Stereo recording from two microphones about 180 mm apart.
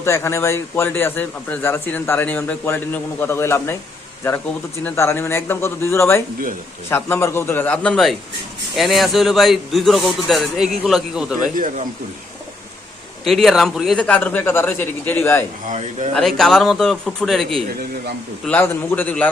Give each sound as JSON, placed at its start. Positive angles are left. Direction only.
{"t": 0.0, "sound": "a man's voice", "side_deg": 15}
{"t": 4.8, "sound": "a man's voice", "side_deg": 10}
{"t": 11.5, "sound": "speech", "side_deg": -45}
{"t": 13.2, "sound": "a man's voice", "side_deg": 0}
{"t": 15.6, "sound": "speech", "side_deg": -40}
{"t": 16.1, "sound": "a man's voice", "side_deg": 0}